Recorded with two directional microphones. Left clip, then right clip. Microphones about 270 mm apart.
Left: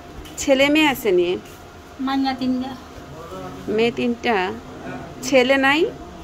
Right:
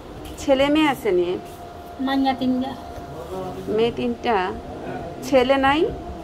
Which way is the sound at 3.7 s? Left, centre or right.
Left.